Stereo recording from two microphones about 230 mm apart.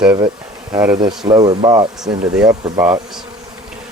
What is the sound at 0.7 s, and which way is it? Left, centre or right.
Speech, centre.